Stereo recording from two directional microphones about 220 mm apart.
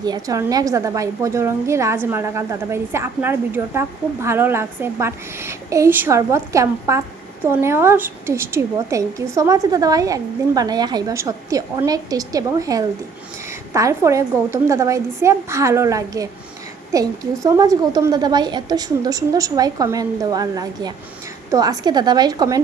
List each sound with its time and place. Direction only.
0.0 s a woman's voice: 15° right (ahead or behind)